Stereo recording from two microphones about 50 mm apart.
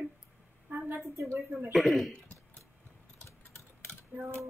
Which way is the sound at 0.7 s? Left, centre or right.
Right.